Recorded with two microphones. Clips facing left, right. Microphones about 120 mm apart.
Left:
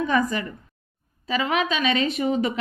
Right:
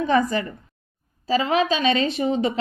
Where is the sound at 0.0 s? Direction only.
35° right (ahead or behind).